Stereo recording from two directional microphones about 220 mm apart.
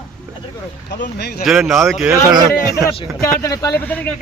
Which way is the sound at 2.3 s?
20° right (ahead or behind).